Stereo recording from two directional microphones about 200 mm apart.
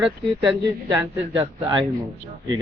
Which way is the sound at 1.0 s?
25° right (ahead or behind).